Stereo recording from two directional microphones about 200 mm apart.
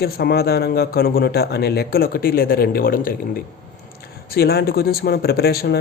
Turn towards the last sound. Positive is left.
turn(degrees=50)  # may be behind; listen again after turning